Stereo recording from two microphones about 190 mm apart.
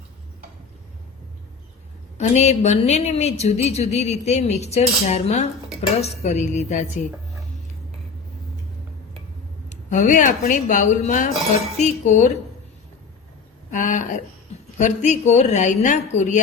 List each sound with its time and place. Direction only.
2.1 s a woman's voice: 35° left (ahead or behind)
9.6 s a woman's voice: 40° left (ahead or behind)
13.7 s a woman's voice: 40° left (ahead or behind)